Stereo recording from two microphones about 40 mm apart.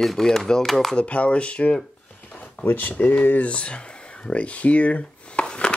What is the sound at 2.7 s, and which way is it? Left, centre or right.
Speech, left.